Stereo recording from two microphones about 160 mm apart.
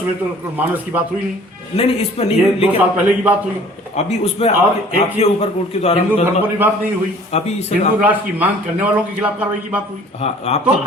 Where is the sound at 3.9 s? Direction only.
40° left (ahead or behind).